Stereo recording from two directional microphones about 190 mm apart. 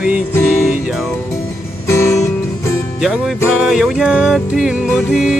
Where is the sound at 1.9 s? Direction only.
15° left (ahead or behind).